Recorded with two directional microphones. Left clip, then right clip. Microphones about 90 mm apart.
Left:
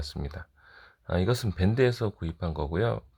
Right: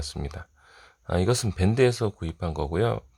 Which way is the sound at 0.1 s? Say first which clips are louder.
Right 3 dB; 30° right (ahead or behind).